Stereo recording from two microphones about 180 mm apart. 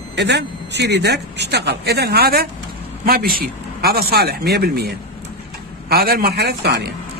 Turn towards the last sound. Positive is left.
turn(degrees=-65)  # may be behind; listen again after turning